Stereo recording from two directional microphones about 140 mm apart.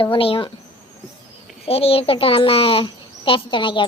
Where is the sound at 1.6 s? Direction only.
45° left (ahead or behind).